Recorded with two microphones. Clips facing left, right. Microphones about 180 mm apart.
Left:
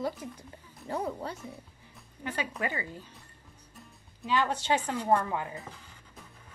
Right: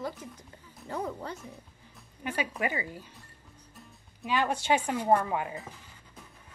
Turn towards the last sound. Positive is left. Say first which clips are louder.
# right 2 dB
turn(degrees=-20)  # may be behind; listen again after turning